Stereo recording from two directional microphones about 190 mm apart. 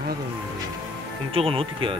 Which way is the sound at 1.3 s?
30° right (ahead or behind).